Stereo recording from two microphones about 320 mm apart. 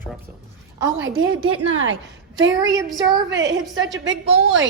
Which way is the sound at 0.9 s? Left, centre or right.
Right.